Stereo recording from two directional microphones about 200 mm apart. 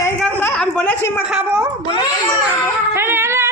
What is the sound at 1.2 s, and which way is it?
Speech, 5° right (ahead or behind).